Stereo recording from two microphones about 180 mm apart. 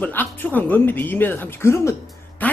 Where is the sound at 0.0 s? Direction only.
10° left (ahead or behind).